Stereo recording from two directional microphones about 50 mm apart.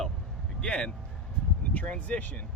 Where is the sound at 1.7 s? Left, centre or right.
Left.